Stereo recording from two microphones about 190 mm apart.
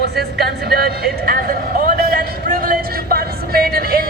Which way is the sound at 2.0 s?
55° right (ahead or behind).